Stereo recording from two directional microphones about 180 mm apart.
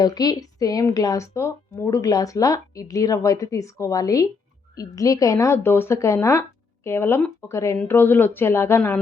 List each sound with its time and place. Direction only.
0.0 s a woman's voice: 20° left (ahead or behind)